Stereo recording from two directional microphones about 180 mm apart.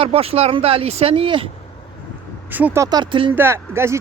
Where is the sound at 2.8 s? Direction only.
25° right (ahead or behind).